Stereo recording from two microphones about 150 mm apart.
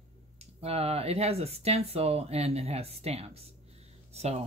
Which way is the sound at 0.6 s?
45° right (ahead or behind).